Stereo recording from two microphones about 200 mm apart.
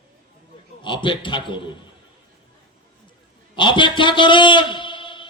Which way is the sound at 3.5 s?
25° left (ahead or behind).